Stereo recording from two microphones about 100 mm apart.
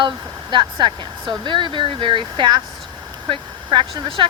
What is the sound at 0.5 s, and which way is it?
Speech, 50° right (ahead or behind).